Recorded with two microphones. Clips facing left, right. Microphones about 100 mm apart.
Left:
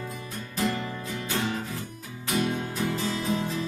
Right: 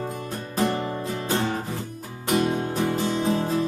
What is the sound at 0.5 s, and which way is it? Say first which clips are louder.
Music: right 4 dB; 35° right (ahead or behind).